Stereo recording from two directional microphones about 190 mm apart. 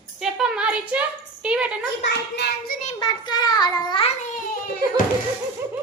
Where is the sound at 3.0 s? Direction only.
25° left (ahead or behind).